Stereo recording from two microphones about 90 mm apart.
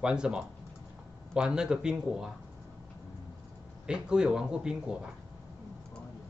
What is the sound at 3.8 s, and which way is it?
Speech, 10° right (ahead or behind).